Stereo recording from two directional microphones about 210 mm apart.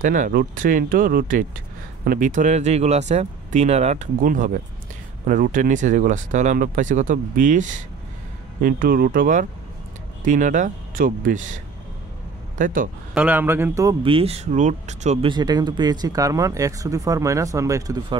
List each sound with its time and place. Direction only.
0.0 s speech: 40° right (ahead or behind)
13.1 s speech: 10° right (ahead or behind); by 15.3 s 35° right (ahead or behind)
15.3 s speech: 20° right (ahead or behind)